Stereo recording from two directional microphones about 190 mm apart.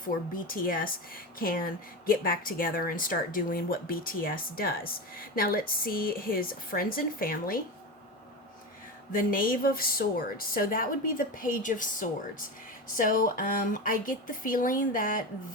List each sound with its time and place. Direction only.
0.0 s speech: 45° left (ahead or behind)
9.1 s speech: 50° left (ahead or behind)